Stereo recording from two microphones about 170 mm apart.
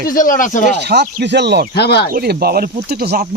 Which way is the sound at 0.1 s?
50° left (ahead or behind).